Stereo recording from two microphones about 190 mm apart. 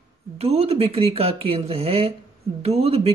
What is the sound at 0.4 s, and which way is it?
Speech, 35° right (ahead or behind).